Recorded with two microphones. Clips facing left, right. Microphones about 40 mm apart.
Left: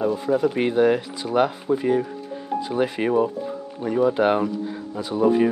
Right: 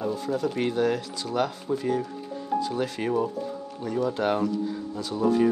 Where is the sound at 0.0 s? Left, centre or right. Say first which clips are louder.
Left 6 dB; centre.